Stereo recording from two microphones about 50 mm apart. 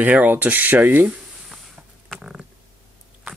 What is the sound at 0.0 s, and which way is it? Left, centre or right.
Speech, right.